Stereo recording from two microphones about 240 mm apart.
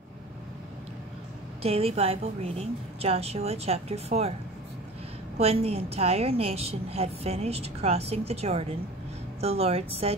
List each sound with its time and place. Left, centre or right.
1.6 s a woman's voice: right
5.4 s a woman's voice: right